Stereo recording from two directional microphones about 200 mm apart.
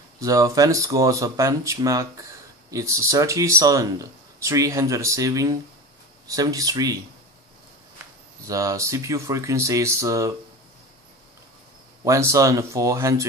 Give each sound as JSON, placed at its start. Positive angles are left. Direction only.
{"t": 0.2, "sound": "speech", "side_deg": -15}
{"t": 8.5, "sound": "speech", "side_deg": -15}
{"t": 12.0, "sound": "speech", "side_deg": -15}